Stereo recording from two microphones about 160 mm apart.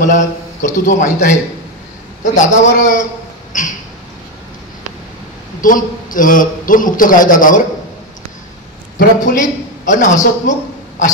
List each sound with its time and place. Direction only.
0.0 s a man's voice: 50° left (ahead or behind)
5.6 s a man's voice: 60° left (ahead or behind)
8.9 s a man's voice: 55° left (ahead or behind)